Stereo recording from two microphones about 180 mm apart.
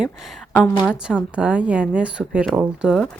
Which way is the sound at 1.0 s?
5° right (ahead or behind).